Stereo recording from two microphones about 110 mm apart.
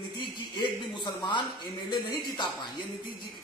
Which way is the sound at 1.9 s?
40° left (ahead or behind).